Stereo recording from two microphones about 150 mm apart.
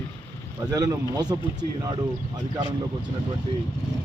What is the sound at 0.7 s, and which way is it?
Speech, 25° right (ahead or behind).